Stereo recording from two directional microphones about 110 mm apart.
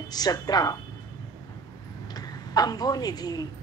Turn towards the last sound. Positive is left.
turn(degrees=35)  # may be behind; listen again after turning